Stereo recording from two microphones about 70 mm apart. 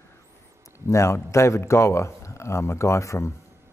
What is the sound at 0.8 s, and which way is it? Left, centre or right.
Speech, left.